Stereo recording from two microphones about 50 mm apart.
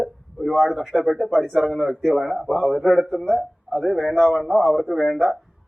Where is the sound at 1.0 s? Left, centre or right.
Centre.